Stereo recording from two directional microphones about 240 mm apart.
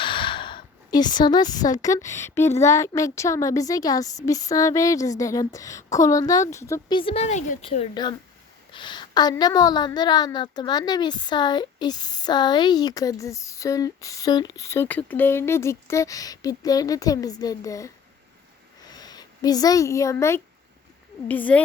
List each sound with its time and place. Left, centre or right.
0.0 s a woman's voice: left